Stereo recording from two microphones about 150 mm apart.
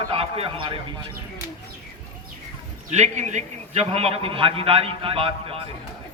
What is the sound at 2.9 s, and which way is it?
A man's voice, 50° right (ahead or behind).